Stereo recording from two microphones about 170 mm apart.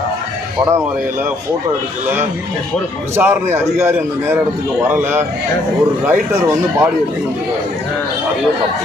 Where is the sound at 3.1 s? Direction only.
15° right (ahead or behind).